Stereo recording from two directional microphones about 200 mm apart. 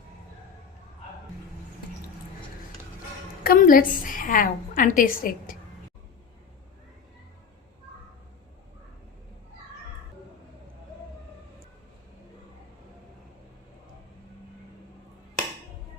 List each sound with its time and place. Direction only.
3.4 s a woman's voice: 45° left (ahead or behind)